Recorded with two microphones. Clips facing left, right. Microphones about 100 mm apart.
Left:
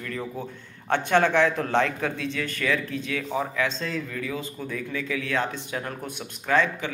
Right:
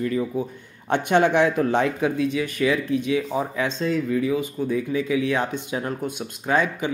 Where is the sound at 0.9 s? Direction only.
15° right (ahead or behind).